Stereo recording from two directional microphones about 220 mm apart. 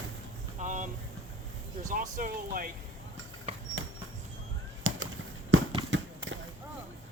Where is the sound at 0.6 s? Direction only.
35° right (ahead or behind).